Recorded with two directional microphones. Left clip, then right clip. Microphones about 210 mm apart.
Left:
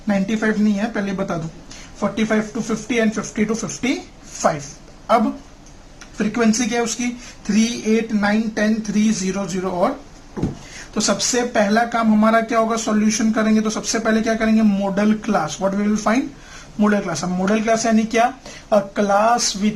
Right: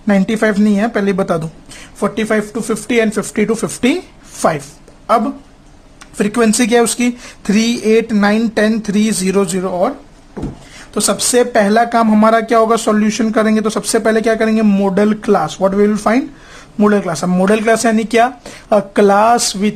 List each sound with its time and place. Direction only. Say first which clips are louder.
0.1 s speech: right 7 dB; 45° right (ahead or behind)
6.1 s speech: right 6 dB; 45° right (ahead or behind)
10.9 s speech: right 6 dB; 40° right (ahead or behind)